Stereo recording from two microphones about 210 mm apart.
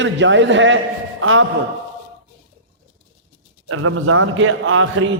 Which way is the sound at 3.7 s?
80° right.